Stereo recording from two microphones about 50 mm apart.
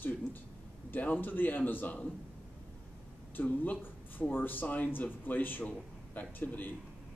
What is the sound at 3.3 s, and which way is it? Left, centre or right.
Speech, left.